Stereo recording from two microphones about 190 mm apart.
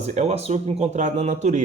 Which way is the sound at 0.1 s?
35° right (ahead or behind).